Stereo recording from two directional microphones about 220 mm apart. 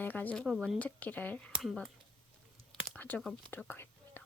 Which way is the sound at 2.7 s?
5° left (ahead or behind).